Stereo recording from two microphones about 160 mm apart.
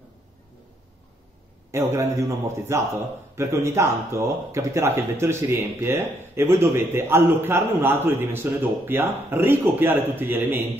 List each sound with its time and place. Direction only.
1.7 s a man's voice: 15° right (ahead or behind)